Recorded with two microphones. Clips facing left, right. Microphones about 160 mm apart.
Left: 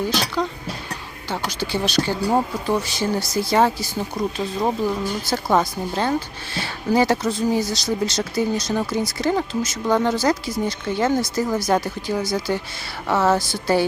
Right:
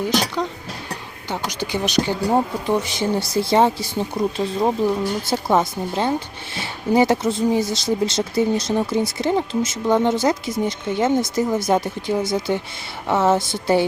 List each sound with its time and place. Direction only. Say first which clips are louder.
0.1 s speech: right 2 dB; 20° right (ahead or behind)
4.2 s speech: right 3 dB; 5° right (ahead or behind)
5.2 s speech: left 1 dB; 25° right (ahead or behind)